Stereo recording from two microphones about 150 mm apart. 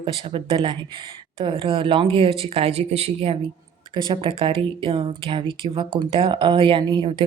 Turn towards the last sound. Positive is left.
turn(degrees=-35)  # may be behind; listen again after turning